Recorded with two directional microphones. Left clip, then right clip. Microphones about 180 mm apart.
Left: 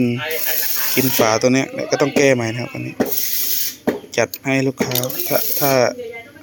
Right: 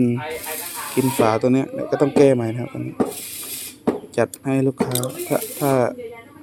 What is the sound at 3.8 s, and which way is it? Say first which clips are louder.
Speech: left 1 dB; 5° right (ahead or behind).